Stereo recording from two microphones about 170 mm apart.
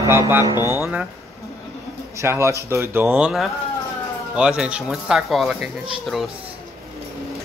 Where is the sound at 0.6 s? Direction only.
20° left (ahead or behind).